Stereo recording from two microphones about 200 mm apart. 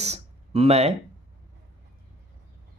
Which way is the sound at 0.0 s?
30° right (ahead or behind).